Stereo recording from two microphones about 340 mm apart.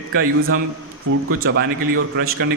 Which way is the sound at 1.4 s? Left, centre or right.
Right.